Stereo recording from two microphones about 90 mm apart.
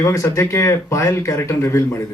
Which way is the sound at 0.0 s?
35° left (ahead or behind).